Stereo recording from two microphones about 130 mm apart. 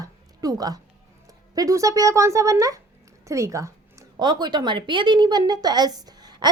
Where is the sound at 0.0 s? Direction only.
30° right (ahead or behind).